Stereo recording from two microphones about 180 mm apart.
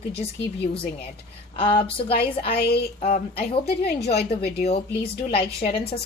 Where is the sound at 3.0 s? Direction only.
35° left (ahead or behind).